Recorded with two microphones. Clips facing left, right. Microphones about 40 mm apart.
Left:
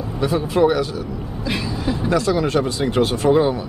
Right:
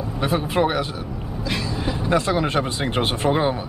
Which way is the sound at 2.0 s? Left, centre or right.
Right.